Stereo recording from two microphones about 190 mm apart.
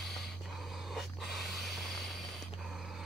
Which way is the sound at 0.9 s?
Centre (ahead or behind).